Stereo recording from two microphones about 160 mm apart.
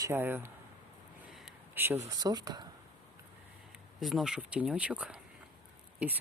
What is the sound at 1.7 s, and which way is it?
Speech, 15° right (ahead or behind).